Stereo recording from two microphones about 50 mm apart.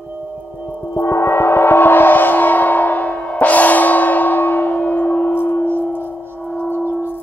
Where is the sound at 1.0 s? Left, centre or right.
Left.